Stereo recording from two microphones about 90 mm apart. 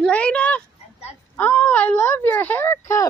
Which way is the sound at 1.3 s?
20° left (ahead or behind).